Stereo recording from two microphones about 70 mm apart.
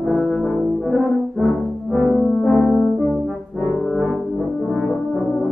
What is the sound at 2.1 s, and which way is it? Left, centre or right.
Music, centre.